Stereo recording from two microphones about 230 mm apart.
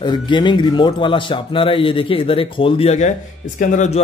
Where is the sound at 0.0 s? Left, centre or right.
Centre.